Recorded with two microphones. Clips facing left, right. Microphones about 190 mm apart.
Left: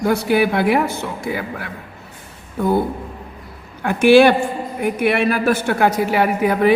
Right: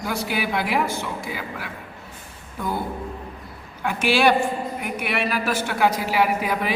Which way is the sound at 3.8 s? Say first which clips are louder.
Left 9 dB; 50° left (ahead or behind).